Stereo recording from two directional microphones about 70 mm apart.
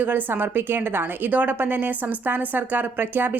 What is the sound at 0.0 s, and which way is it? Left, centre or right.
A woman's voice, right.